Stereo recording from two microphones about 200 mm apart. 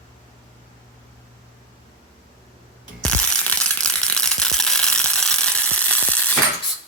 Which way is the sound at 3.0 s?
5° left (ahead or behind).